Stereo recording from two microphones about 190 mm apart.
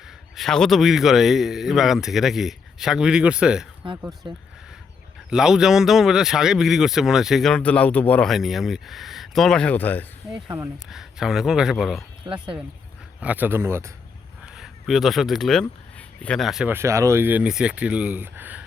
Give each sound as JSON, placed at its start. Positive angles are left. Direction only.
{"t": 0.3, "sound": "speech", "side_deg": 5}
{"t": 5.3, "sound": "speech", "side_deg": -5}
{"t": 10.8, "sound": "speech", "side_deg": 0}
{"t": 12.2, "sound": "speech", "side_deg": -25}
{"t": 13.1, "sound": "speech", "side_deg": -10}
{"t": 14.4, "sound": "speech", "side_deg": 0}